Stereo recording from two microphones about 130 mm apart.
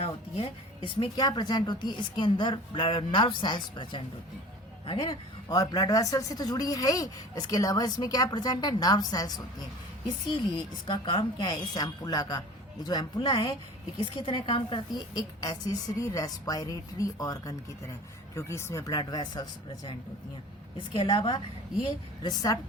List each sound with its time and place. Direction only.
0.0 s speech: 50° left (ahead or behind); by 22.5 s 30° left (ahead or behind)